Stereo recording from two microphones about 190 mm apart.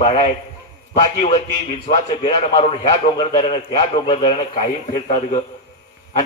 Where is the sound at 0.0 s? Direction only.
35° left (ahead or behind).